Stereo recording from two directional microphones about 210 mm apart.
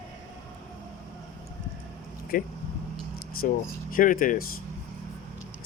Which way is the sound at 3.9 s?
40° left (ahead or behind).